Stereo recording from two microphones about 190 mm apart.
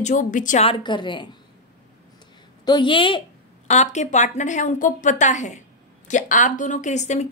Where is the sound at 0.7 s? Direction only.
25° left (ahead or behind).